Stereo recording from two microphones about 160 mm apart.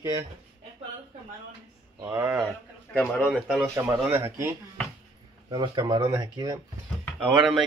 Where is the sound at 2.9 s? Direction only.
10° left (ahead or behind).